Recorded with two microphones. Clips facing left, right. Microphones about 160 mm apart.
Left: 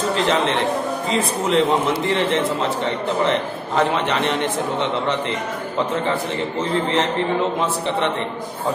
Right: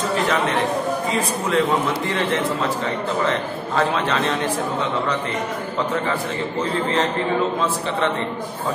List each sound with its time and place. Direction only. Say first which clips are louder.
0.2 s a man's voice: left 2 dB; 25° left (ahead or behind)
3.3 s a man's voice: left 2 dB; 20° left (ahead or behind)